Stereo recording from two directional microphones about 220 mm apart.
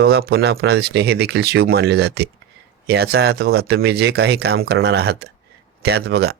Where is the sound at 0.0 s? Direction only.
45° right (ahead or behind).